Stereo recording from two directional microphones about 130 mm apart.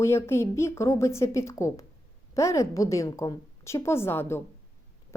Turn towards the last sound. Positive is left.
turn(degrees=20)  # may be behind; listen again after turning